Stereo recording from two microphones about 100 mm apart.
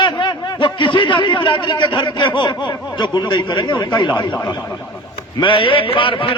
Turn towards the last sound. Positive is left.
turn(degrees=60)  # may be behind; listen again after turning